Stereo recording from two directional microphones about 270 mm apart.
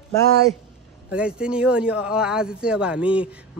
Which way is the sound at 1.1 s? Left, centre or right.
Centre.